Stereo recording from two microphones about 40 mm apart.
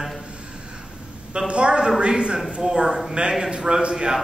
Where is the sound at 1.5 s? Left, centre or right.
Right.